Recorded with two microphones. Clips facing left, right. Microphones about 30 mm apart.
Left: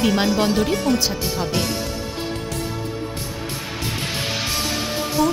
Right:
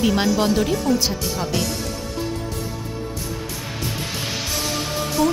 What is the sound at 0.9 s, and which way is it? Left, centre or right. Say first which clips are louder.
Speech: even; left.